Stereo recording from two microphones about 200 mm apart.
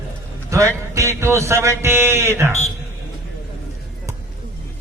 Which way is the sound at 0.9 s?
15° right (ahead or behind).